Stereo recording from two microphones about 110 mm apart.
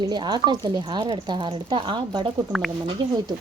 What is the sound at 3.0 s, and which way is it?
Speech, 45° right (ahead or behind).